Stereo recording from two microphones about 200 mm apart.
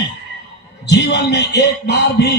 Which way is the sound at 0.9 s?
60° left (ahead or behind).